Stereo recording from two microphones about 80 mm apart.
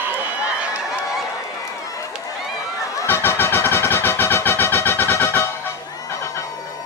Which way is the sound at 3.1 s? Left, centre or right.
Left.